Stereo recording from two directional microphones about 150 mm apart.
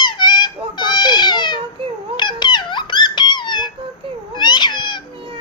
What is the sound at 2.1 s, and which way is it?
Squeak, 30° left (ahead or behind).